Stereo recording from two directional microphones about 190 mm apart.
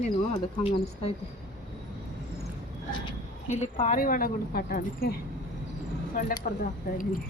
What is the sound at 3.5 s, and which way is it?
Speech, 40° left (ahead or behind).